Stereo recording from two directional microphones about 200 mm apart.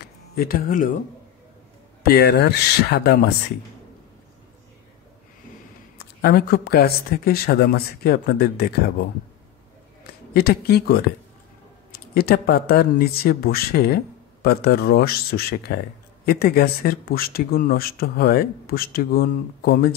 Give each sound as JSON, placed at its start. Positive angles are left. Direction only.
{"t": 0.4, "sound": "speech", "side_deg": 50}
{"t": 2.0, "sound": "speech", "side_deg": 50}
{"t": 5.9, "sound": "speech", "side_deg": 50}
{"t": 10.3, "sound": "speech", "side_deg": 50}